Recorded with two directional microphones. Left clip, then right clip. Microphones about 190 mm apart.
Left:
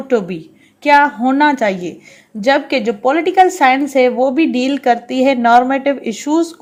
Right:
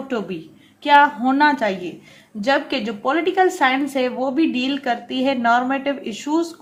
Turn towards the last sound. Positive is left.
turn(degrees=30)  # may be behind; listen again after turning